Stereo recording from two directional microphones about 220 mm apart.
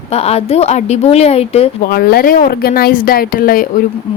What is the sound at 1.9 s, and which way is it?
A woman's voice, 45° left (ahead or behind).